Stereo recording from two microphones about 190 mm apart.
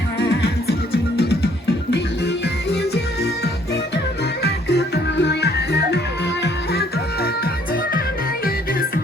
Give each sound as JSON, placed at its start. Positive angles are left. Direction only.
{"t": 0.2, "sound": "music", "side_deg": 60}